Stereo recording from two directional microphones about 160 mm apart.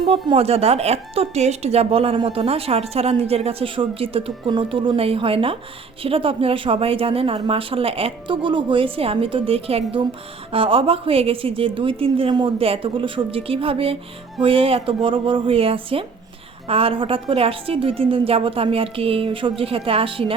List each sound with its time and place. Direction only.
0.0 s a woman's voice: 35° right (ahead or behind)